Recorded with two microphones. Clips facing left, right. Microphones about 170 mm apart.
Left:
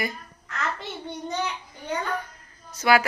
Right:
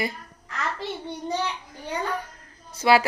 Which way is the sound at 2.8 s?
30° right (ahead or behind).